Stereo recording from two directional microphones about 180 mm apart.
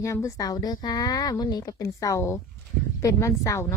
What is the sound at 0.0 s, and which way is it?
A woman's voice, 15° left (ahead or behind).